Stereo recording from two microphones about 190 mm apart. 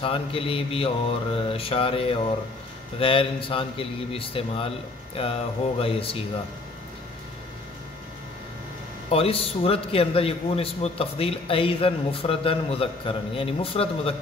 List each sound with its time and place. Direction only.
0.0 s a man's voice: 30° left (ahead or behind)
9.1 s a man's voice: 30° left (ahead or behind)